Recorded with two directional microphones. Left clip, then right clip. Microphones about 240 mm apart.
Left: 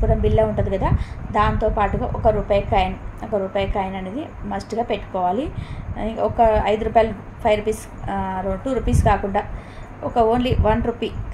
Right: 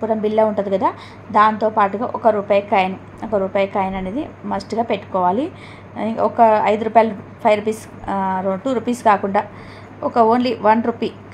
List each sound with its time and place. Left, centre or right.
0.2 s a woman's voice: right